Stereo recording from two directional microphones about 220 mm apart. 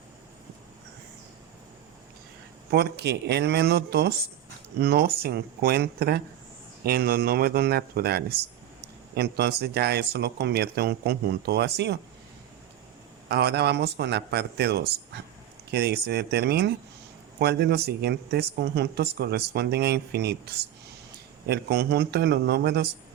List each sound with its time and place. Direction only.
2.6 s speech: 45° right (ahead or behind)
13.2 s speech: 50° right (ahead or behind)